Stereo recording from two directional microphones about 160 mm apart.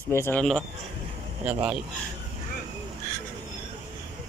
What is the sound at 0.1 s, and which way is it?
Speech, 15° left (ahead or behind).